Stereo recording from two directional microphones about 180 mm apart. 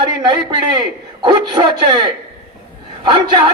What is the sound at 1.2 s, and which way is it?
A man's voice, 25° right (ahead or behind).